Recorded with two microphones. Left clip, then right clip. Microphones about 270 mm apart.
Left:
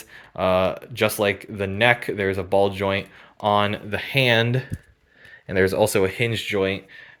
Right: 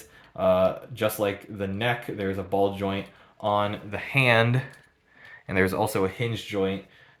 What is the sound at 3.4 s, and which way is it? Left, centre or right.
Speech, left.